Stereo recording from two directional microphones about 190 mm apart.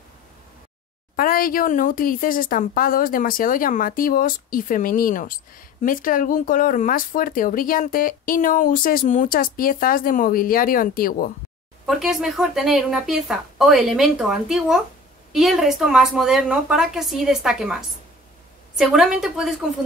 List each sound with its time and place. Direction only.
1.1 s speech: 50° left (ahead or behind)
11.8 s speech: centre (ahead or behind)